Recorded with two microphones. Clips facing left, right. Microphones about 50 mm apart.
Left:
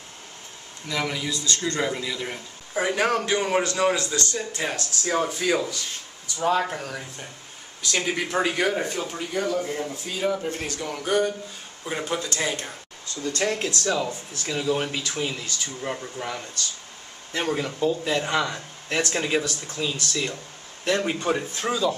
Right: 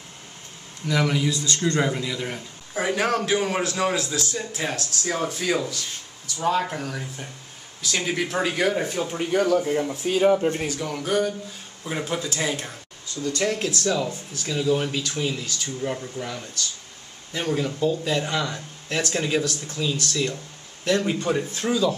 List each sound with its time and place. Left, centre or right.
0.8 s a man's voice: centre
1.3 s a man's voice: right
1.7 s a man's voice: centre
10.0 s speech: right
10.3 s speech: right
10.6 s a man's voice: centre
13.4 s speech: centre